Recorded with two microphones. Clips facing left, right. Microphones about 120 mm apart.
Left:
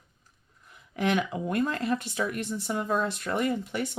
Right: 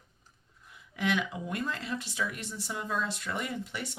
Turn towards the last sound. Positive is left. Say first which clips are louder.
# left 8 dB
turn(degrees=50)  # may be behind; listen again after turning